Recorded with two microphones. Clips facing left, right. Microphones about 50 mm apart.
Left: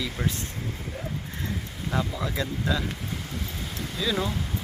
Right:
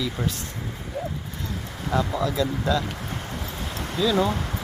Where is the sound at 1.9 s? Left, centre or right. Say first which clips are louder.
Right 4 dB; centre.